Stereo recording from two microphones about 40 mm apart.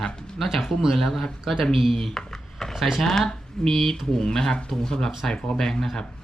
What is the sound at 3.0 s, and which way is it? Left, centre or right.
Speech, centre.